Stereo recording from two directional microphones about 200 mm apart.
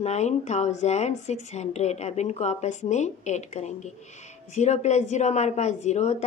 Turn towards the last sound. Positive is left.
turn(degrees=35)  # may be behind; listen again after turning